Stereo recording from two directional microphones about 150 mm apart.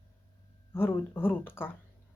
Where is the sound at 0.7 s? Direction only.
15° left (ahead or behind).